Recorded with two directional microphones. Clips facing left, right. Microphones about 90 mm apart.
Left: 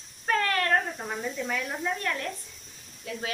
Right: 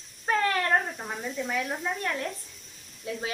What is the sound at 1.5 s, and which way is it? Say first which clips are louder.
Speech: right 1 dB; 20° right (ahead or behind).